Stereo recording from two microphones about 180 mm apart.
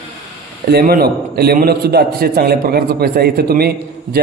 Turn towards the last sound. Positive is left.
turn(degrees=-60)  # may be behind; listen again after turning